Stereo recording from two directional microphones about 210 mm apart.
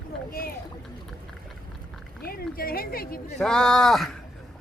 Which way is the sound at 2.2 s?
45° left (ahead or behind).